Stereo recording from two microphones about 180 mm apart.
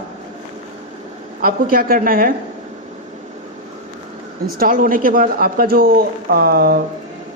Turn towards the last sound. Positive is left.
turn(degrees=-60)  # may be behind; listen again after turning